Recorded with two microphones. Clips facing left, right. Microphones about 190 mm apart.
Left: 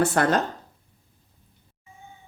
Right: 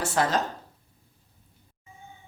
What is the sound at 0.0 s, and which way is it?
Speech, 60° left (ahead or behind).